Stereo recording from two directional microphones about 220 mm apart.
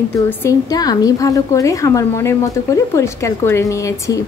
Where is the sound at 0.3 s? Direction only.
10° left (ahead or behind).